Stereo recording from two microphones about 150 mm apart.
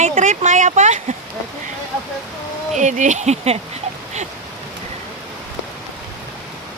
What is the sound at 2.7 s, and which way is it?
Speech, 55° right (ahead or behind).